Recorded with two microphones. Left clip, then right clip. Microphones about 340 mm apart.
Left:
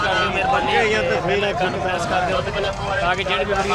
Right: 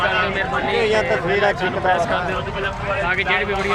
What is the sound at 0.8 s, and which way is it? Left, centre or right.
Speech, centre.